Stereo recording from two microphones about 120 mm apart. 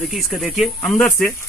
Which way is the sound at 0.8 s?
15° left (ahead or behind).